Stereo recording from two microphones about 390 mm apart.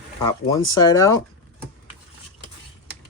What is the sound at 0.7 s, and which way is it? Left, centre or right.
Speech, centre.